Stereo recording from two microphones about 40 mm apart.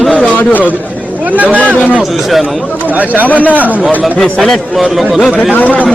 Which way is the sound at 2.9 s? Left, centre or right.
Right.